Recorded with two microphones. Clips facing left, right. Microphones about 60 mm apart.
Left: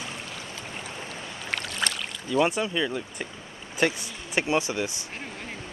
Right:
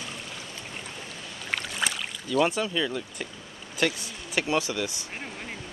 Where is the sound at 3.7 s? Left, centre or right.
Left.